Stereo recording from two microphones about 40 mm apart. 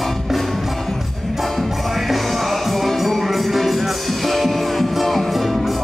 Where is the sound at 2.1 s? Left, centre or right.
Centre.